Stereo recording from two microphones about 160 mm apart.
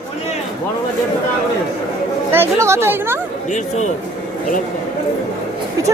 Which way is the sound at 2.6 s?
15° right (ahead or behind).